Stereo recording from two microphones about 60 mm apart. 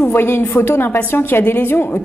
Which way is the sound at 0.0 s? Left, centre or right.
Left.